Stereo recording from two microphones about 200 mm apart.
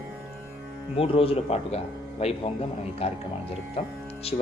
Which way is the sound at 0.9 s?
30° left (ahead or behind).